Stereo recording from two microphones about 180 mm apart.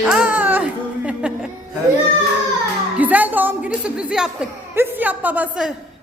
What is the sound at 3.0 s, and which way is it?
Speech, 10° right (ahead or behind).